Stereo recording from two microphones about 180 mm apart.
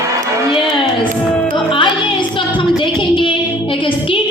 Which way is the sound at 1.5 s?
25° left (ahead or behind).